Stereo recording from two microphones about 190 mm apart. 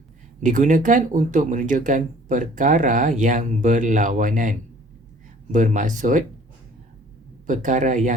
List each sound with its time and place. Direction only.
0.3 s speech: 40° right (ahead or behind)
7.4 s speech: 40° right (ahead or behind)